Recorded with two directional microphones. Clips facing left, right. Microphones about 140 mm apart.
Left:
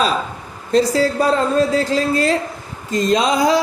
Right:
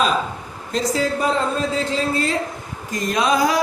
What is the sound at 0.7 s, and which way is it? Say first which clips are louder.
Speech: left 6 dB; 35° left (ahead or behind).